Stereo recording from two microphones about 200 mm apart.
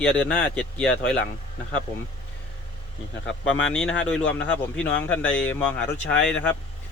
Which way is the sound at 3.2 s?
75° left (ahead or behind).